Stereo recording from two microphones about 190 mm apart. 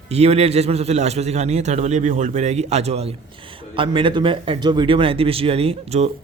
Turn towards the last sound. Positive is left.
turn(degrees=-35)  # may be behind; listen again after turning